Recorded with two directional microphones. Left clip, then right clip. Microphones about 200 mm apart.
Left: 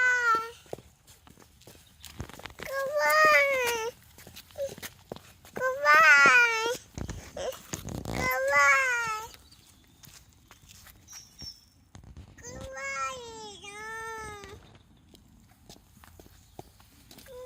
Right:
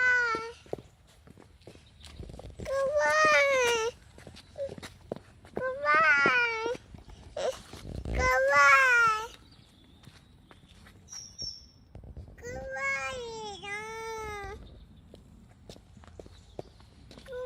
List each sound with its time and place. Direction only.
0.0 s babbling: 30° left (ahead or behind)
1.6 s walk: 45° left (ahead or behind)
2.6 s a sound: centre (ahead or behind)
5.1 s babbling: 50° left (ahead or behind)
8.2 s child singing: 10° right (ahead or behind)
10.5 s dog: 50° left (ahead or behind)
12.4 s baby cry: 15° right (ahead or behind)